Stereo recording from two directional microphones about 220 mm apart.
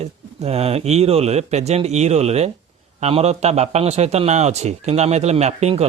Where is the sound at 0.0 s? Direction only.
30° right (ahead or behind).